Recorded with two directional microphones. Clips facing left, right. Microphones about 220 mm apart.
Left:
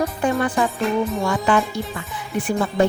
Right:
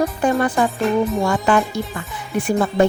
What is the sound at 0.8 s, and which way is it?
Music, centre (ahead or behind).